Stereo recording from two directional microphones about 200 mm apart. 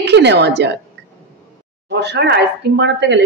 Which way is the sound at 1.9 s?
60° right (ahead or behind).